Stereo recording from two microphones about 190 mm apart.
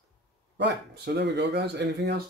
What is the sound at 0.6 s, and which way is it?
Speech, 65° right (ahead or behind).